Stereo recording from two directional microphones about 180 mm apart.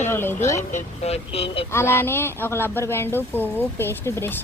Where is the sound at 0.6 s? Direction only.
45° left (ahead or behind).